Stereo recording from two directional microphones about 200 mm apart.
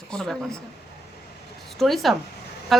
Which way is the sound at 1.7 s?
Centre (ahead or behind).